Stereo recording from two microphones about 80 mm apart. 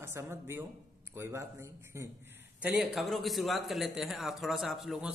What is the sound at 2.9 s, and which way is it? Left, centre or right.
Speech, centre.